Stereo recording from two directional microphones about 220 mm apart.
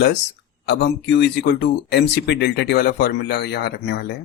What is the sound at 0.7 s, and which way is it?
Speech, 50° left (ahead or behind).